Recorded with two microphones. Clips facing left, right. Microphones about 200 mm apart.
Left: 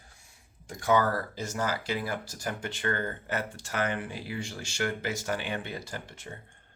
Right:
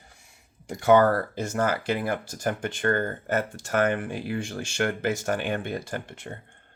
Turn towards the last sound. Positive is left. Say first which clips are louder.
# right 6 dB
turn(degrees=-55)  # may be behind; listen again after turning